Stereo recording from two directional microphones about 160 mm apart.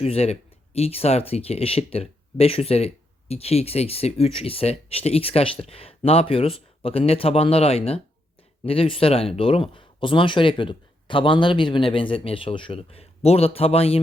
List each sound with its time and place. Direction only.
0.0 s speech: 40° left (ahead or behind)